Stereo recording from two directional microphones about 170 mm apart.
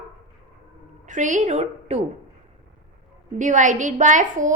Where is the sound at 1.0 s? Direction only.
45° right (ahead or behind).